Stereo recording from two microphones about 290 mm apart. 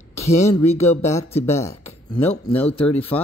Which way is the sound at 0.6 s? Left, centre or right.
Left.